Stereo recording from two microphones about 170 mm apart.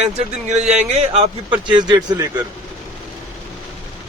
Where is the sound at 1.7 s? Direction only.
25° right (ahead or behind).